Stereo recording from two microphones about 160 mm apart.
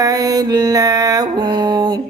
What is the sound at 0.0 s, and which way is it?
Music, 25° right (ahead or behind).